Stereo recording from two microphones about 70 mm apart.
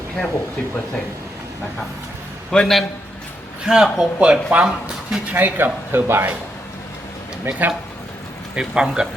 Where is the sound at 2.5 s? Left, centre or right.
Centre.